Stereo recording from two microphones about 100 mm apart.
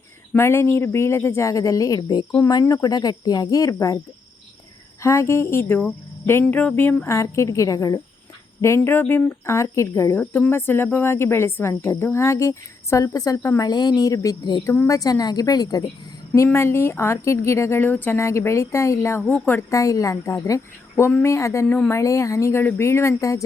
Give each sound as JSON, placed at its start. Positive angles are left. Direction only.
{"t": 0.3, "sound": "a woman's voice", "side_deg": 25}
{"t": 5.0, "sound": "a woman's voice", "side_deg": 30}
{"t": 10.2, "sound": "a woman's voice", "side_deg": 20}
{"t": 13.7, "sound": "speech", "side_deg": 40}
{"t": 16.3, "sound": "a woman's voice", "side_deg": 25}
{"t": 19.2, "sound": "a woman's voice", "side_deg": 15}
{"t": 19.7, "sound": "speech", "side_deg": 35}
{"t": 21.7, "sound": "a woman's voice", "side_deg": 15}
{"t": 21.9, "sound": "a woman's voice", "side_deg": 30}